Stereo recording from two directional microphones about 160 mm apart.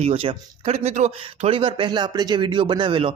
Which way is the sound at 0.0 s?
40° right (ahead or behind).